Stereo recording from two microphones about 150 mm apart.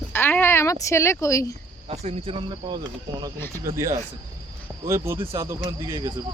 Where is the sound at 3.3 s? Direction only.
15° left (ahead or behind).